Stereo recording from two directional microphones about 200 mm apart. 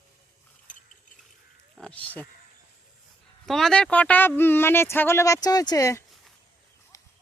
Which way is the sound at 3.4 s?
Centre (ahead or behind).